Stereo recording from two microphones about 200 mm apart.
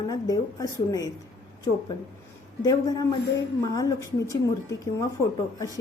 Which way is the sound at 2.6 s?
20° left (ahead or behind).